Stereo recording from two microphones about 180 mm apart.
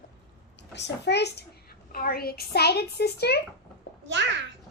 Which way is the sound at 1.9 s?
55° left (ahead or behind).